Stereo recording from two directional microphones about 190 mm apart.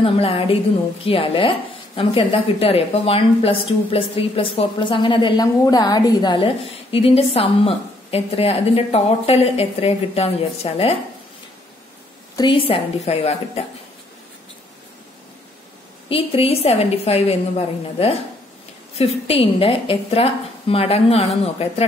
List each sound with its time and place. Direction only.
0.0 s speech: 30° left (ahead or behind)
12.4 s a woman's voice: 25° left (ahead or behind)
16.1 s a woman's voice: 30° left (ahead or behind)